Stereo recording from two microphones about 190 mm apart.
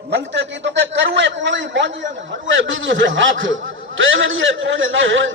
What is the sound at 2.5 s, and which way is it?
A man's voice, 85° right.